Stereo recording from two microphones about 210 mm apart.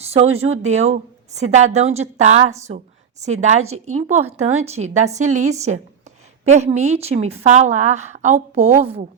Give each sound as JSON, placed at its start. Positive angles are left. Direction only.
{"t": 0.1, "sound": "a woman's voice", "side_deg": -30}